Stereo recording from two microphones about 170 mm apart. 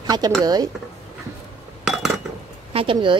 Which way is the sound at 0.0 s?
25° right (ahead or behind).